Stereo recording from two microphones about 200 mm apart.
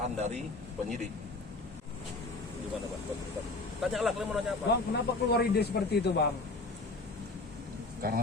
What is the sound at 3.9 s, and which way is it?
Speech, centre (ahead or behind).